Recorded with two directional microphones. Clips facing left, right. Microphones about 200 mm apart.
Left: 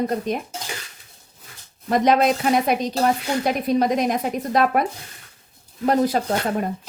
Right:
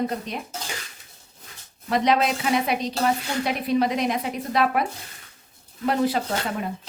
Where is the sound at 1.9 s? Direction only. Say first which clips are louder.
Left 4 dB; 45° left (ahead or behind).